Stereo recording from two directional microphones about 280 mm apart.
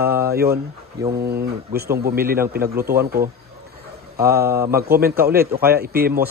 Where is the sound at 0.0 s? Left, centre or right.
Centre.